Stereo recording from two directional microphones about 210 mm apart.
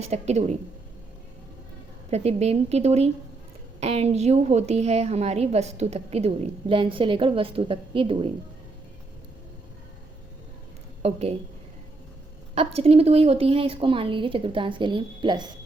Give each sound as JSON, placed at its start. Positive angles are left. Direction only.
{"t": 0.0, "sound": "a woman's voice", "side_deg": -30}
{"t": 2.0, "sound": "a woman's voice", "side_deg": -30}
{"t": 11.0, "sound": "a woman's voice", "side_deg": -30}
{"t": 12.5, "sound": "a woman's voice", "side_deg": -30}